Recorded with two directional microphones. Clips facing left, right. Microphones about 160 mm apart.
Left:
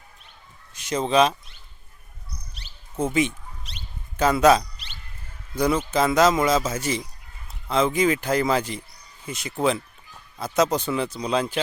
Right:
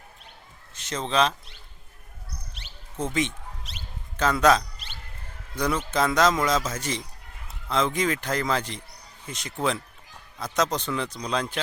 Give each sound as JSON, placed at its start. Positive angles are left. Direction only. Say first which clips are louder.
{"t": 0.7, "sound": "speech", "louder": "left 6 dB", "side_deg": 10}
{"t": 3.0, "sound": "a sound", "louder": "left 4 dB", "side_deg": 10}
{"t": 4.2, "sound": "speech", "louder": "left 3 dB", "side_deg": 10}